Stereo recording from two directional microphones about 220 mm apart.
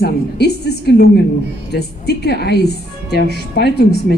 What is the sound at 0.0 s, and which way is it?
A woman's voice, 50° left (ahead or behind).